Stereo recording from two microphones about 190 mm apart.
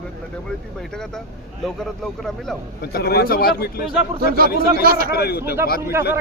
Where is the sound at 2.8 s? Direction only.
55° left (ahead or behind).